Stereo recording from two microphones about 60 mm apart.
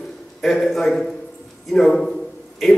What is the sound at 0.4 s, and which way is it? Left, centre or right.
A man's voice, centre.